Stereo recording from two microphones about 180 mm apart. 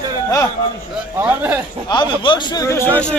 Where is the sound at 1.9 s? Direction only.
25° left (ahead or behind).